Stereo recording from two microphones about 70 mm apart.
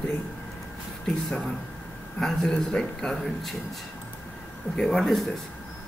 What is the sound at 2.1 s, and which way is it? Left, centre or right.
Speech, centre.